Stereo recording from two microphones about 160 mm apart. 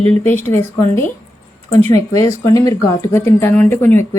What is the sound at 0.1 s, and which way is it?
A woman's voice, 15° left (ahead or behind).